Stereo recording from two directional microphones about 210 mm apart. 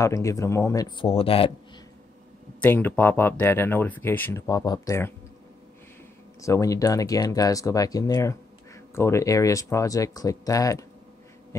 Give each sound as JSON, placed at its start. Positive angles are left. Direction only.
{"t": 0.0, "sound": "speech", "side_deg": 15}
{"t": 2.6, "sound": "speech", "side_deg": 10}
{"t": 6.4, "sound": "speech", "side_deg": 15}